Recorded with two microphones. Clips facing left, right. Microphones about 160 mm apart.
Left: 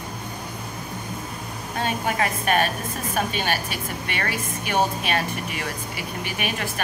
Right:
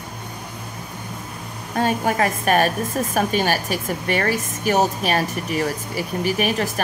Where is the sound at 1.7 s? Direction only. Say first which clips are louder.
Right 5 dB; 40° right (ahead or behind).